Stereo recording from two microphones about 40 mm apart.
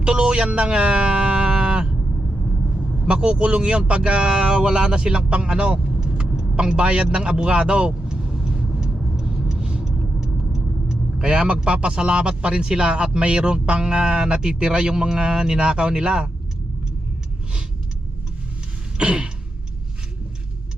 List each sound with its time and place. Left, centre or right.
0.0 s speech: right
3.1 s speech: right
8.1 s vehicle: right
13.1 s speech: right
18.9 s speech: right